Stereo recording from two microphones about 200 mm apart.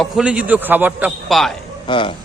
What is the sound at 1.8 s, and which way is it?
Speech, 25° left (ahead or behind).